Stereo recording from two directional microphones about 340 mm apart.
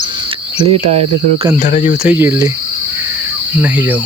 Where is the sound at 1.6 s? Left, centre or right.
Left.